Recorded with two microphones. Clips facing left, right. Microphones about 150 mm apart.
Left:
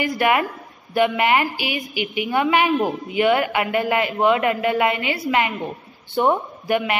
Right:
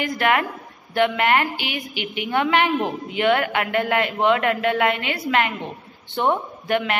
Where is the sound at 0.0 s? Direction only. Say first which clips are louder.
Left 2 dB; 10° left (ahead or behind).